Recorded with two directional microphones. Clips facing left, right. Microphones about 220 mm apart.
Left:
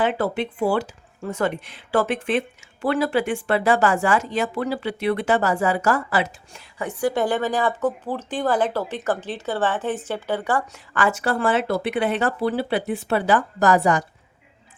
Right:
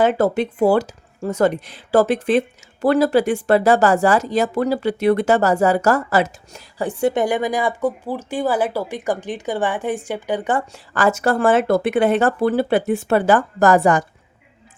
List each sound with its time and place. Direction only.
0.0 s speech: 40° right (ahead or behind)
7.1 s speech: 15° right (ahead or behind)
10.9 s speech: 40° right (ahead or behind)